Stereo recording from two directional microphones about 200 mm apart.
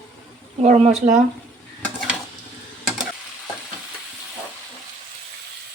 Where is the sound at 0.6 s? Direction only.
35° right (ahead or behind).